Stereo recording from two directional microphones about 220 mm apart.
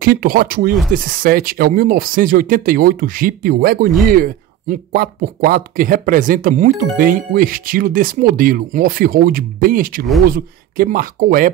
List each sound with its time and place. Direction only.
0.0 s speech: 40° right (ahead or behind)